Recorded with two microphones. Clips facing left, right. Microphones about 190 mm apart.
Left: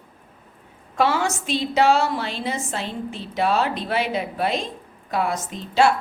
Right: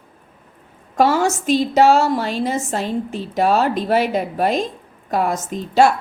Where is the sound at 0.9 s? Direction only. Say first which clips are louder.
Right 5 dB; 40° right (ahead or behind).